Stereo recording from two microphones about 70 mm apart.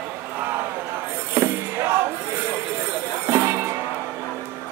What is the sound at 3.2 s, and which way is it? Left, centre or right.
Music, right.